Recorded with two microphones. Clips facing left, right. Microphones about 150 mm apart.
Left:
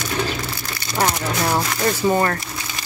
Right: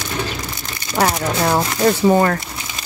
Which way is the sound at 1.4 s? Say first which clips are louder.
Right 5 dB; 25° right (ahead or behind).